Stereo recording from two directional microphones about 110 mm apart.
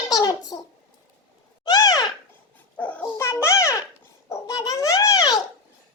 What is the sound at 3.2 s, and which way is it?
A woman's voice, 25° left (ahead or behind).